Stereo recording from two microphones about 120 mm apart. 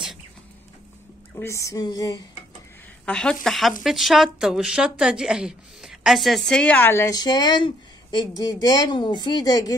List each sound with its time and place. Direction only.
1.3 s a sound: 20° left (ahead or behind)
3.1 s a woman's voice: 5° left (ahead or behind)
7.2 s speech: 35° left (ahead or behind)